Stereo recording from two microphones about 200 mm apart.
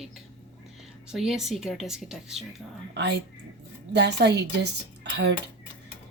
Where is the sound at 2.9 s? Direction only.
60° right (ahead or behind).